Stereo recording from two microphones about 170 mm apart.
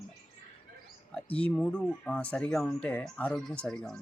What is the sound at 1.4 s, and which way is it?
Speech, 10° left (ahead or behind).